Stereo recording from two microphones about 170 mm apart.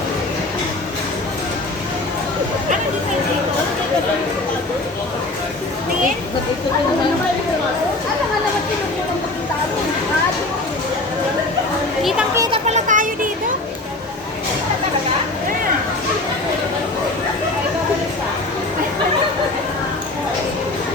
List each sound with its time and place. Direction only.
12.6 s children playing: 45° right (ahead or behind)